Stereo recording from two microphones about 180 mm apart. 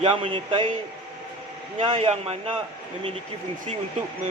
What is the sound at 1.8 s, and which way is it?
Speech, 35° right (ahead or behind).